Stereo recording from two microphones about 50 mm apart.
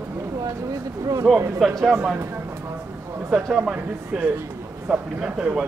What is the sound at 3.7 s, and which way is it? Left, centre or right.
Speech, right.